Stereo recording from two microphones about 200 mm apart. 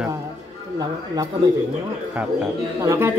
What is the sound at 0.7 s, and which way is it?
Speech, 20° right (ahead or behind).